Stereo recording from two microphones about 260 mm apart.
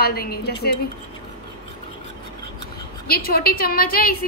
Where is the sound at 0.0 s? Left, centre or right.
Left.